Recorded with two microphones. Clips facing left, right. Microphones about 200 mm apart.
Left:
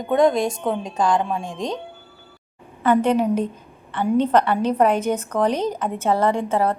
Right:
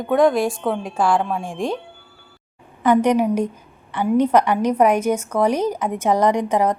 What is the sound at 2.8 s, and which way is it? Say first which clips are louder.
A woman's voice: right 2 dB; 15° right (ahead or behind).